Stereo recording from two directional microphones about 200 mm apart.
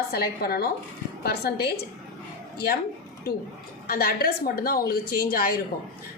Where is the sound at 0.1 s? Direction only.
50° left (ahead or behind).